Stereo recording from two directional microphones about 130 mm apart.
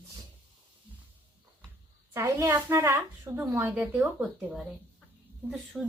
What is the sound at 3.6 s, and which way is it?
Speech, 10° right (ahead or behind).